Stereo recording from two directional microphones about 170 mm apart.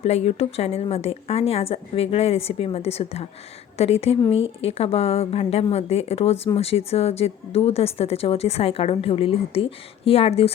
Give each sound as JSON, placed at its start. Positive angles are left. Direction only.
{"t": 0.0, "sound": "speech", "side_deg": 40}